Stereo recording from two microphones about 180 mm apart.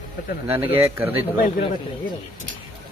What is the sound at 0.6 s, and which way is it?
Speech, 30° right (ahead or behind).